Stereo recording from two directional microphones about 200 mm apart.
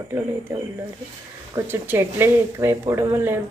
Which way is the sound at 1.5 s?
10° right (ahead or behind).